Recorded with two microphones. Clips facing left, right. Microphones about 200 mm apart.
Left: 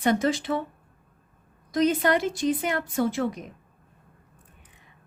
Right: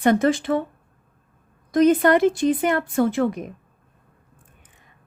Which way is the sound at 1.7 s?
50° right (ahead or behind).